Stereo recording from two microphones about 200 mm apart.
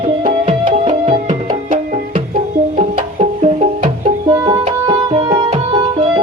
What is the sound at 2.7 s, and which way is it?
Music, 35° right (ahead or behind).